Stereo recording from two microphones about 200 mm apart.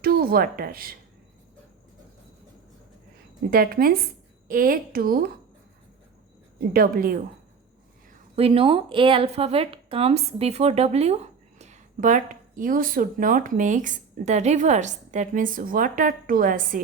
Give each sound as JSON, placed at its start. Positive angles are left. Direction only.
{"t": 0.0, "sound": "speech", "side_deg": -50}
{"t": 3.5, "sound": "a woman's voice", "side_deg": -45}
{"t": 6.7, "sound": "a woman's voice", "side_deg": -45}
{"t": 8.4, "sound": "speech", "side_deg": -30}